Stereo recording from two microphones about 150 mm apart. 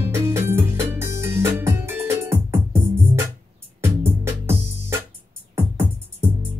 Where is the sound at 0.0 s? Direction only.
15° right (ahead or behind).